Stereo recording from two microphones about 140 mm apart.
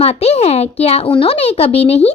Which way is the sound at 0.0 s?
50° left (ahead or behind).